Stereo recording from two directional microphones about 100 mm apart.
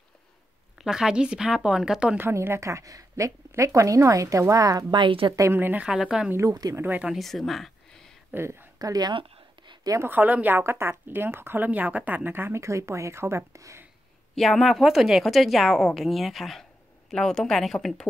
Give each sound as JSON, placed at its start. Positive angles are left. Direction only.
{"t": 0.7, "sound": "speech", "side_deg": -5}
{"t": 2.1, "sound": "a woman's voice", "side_deg": -25}
{"t": 4.9, "sound": "a woman's voice", "side_deg": -55}
{"t": 5.3, "sound": "a woman's voice", "side_deg": -30}
{"t": 5.6, "sound": "speech", "side_deg": -20}
{"t": 5.9, "sound": "a woman's voice", "side_deg": -5}
{"t": 6.3, "sound": "a woman's voice", "side_deg": -35}
{"t": 6.7, "sound": "speech", "side_deg": -20}
{"t": 7.1, "sound": "speech", "side_deg": 0}
{"t": 8.3, "sound": "speech", "side_deg": -20}
{"t": 8.7, "sound": "speech", "side_deg": -40}
{"t": 9.1, "sound": "a sound", "side_deg": -55}
{"t": 10.0, "sound": "a woman's voice", "side_deg": -15}
{"t": 14.3, "sound": "a woman's voice", "side_deg": 0}